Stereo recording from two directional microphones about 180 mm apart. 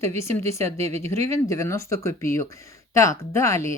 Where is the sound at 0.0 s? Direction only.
15° left (ahead or behind).